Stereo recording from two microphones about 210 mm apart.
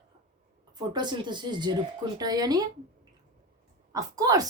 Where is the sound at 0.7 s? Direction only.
20° right (ahead or behind).